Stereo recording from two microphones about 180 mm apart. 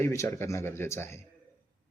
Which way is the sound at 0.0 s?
15° left (ahead or behind).